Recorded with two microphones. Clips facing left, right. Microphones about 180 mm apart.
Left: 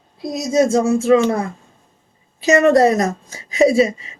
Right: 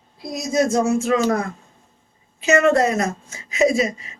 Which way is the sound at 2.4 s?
35° left (ahead or behind).